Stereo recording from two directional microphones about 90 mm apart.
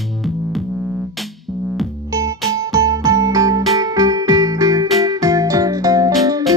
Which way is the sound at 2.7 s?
40° right (ahead or behind).